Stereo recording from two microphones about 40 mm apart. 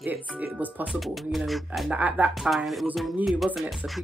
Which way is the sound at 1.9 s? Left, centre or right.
Right.